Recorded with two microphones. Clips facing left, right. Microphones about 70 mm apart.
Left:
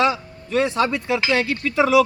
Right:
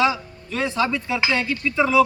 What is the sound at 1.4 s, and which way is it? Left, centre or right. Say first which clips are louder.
Speech: left 2 dB; left.